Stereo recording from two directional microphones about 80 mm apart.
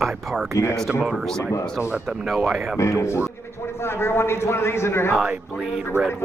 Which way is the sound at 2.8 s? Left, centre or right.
Left.